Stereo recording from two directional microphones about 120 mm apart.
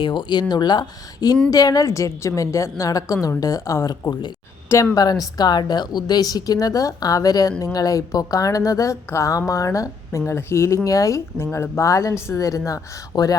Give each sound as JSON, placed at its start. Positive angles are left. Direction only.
{"t": 0.0, "sound": "a woman's voice", "side_deg": 40}
{"t": 4.1, "sound": "a woman's voice", "side_deg": 40}
{"t": 4.7, "sound": "a woman's voice", "side_deg": 25}